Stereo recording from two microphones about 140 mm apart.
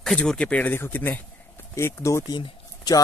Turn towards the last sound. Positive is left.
turn(degrees=30)  # may be behind; listen again after turning